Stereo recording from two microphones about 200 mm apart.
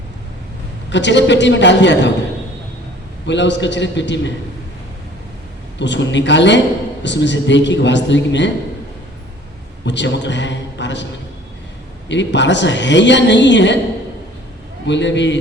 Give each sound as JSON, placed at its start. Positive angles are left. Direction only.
{"t": 0.9, "sound": "a woman's voice", "side_deg": 60}
{"t": 3.2, "sound": "a woman's voice", "side_deg": 60}
{"t": 5.8, "sound": "a woman's voice", "side_deg": 65}
{"t": 9.8, "sound": "a woman's voice", "side_deg": 60}
{"t": 12.0, "sound": "a woman's voice", "side_deg": 60}
{"t": 14.8, "sound": "a woman's voice", "side_deg": 60}